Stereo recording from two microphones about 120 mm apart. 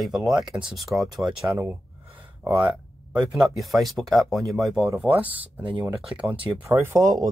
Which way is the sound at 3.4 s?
Centre (ahead or behind).